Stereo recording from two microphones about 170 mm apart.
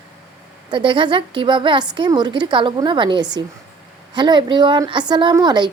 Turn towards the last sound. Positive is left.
turn(degrees=-25)  # may be behind; listen again after turning